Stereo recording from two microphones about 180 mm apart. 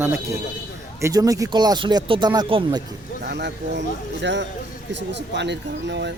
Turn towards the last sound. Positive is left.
turn(degrees=-75)  # may be behind; listen again after turning